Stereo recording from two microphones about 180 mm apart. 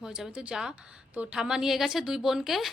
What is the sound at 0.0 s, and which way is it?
A woman's voice, 5° right (ahead or behind).